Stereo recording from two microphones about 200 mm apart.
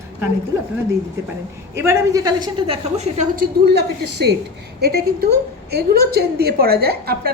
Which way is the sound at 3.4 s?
55° right (ahead or behind).